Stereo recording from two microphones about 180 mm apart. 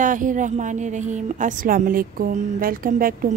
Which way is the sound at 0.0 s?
45° right (ahead or behind).